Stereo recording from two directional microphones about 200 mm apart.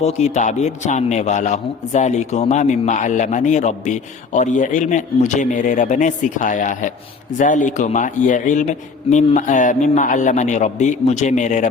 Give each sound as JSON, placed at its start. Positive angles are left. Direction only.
{"t": 0.0, "sound": "a man's voice", "side_deg": 35}